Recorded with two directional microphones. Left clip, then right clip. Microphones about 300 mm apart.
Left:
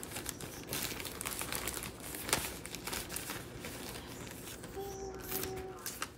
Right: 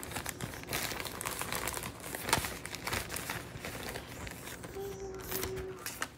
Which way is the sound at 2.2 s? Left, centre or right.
Centre.